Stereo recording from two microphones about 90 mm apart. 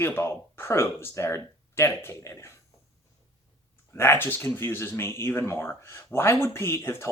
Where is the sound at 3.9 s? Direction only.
30° left (ahead or behind).